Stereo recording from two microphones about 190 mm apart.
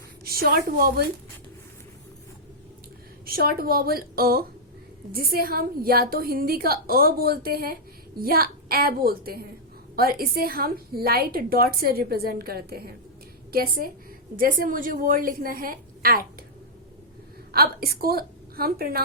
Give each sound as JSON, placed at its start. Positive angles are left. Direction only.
{"t": 0.3, "sound": "a woman's voice", "side_deg": -55}
{"t": 3.2, "sound": "a woman's voice", "side_deg": -50}
{"t": 17.5, "sound": "a woman's voice", "side_deg": -55}